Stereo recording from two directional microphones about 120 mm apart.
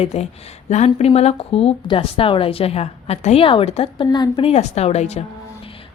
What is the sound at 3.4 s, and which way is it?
Speech, 50° left (ahead or behind).